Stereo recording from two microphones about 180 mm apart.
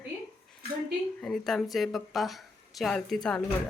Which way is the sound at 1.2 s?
Centre (ahead or behind).